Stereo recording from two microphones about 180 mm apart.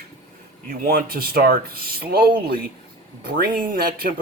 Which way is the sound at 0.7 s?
55° right (ahead or behind).